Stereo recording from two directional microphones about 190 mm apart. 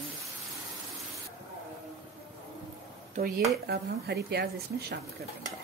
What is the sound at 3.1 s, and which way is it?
Speech, 40° right (ahead or behind).